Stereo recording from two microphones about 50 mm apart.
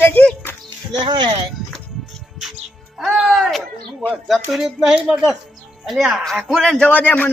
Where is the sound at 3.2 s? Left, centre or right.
Centre.